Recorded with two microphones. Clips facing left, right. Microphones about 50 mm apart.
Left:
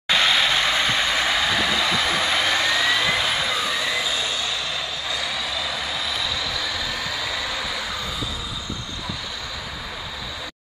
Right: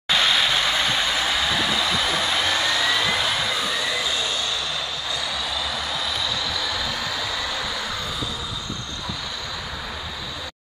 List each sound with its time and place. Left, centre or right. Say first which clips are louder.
0.2 s vehicle: left 1 dB; left